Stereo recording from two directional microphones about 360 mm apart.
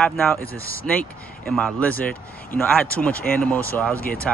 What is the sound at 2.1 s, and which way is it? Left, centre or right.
Speech, left.